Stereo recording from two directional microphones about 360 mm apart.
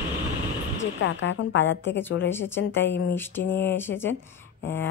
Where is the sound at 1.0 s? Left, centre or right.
Left.